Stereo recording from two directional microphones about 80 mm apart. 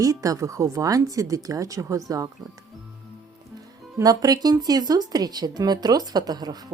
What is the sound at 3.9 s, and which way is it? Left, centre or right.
Speech, right.